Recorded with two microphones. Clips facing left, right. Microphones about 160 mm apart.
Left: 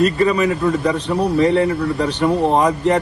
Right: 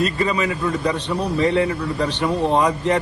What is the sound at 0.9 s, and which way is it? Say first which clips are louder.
Speech: left 4 dB; centre (ahead or behind).